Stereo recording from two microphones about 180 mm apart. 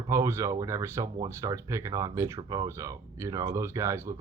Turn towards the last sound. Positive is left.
turn(degrees=-15)  # may be behind; listen again after turning